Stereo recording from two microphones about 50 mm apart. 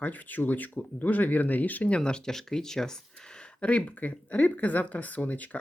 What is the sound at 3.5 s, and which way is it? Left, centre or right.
Speech, left.